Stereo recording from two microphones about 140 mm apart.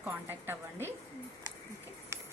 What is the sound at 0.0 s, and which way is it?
Speech, 15° right (ahead or behind).